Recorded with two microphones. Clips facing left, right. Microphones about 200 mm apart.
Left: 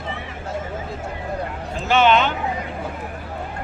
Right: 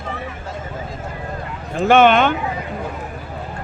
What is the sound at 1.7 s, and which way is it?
Speech, 55° right (ahead or behind).